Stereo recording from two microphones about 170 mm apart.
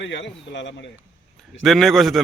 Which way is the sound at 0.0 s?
90° left.